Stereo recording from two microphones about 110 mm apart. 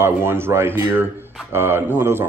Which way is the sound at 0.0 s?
20° right (ahead or behind).